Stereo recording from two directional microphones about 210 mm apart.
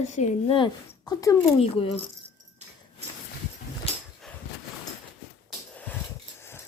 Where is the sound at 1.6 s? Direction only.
25° left (ahead or behind).